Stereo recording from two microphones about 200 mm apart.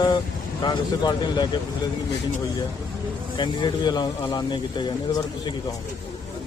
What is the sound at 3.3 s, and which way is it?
Speech, 20° left (ahead or behind).